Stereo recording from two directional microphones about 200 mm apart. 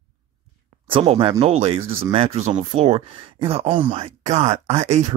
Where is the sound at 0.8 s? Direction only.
25° right (ahead or behind).